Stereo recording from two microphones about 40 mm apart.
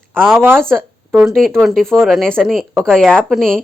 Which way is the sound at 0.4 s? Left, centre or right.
Right.